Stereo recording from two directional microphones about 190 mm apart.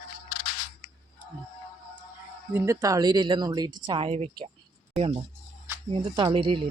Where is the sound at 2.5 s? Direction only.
15° right (ahead or behind).